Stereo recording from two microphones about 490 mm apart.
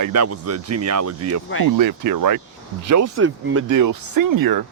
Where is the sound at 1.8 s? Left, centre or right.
Right.